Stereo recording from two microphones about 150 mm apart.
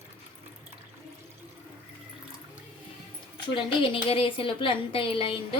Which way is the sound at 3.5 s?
35° left (ahead or behind).